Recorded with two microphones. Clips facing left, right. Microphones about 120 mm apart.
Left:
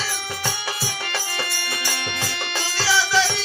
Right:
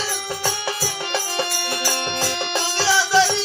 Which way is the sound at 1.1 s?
25° right (ahead or behind).